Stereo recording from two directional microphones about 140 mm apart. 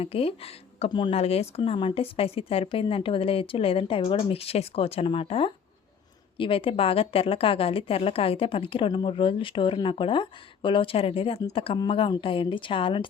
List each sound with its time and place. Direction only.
0.0 s a woman's voice: 45° left (ahead or behind)